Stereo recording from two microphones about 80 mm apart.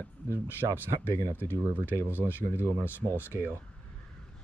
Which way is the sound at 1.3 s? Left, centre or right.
Left.